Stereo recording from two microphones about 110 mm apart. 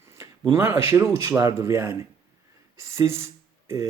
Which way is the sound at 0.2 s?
25° right (ahead or behind).